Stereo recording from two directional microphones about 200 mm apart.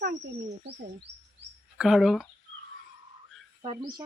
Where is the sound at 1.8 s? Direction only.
Centre (ahead or behind).